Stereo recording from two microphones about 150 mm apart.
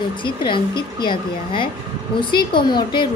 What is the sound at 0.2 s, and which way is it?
A woman's voice, 35° left (ahead or behind).